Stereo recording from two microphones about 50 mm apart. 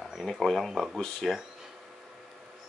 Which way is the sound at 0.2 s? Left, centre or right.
Centre.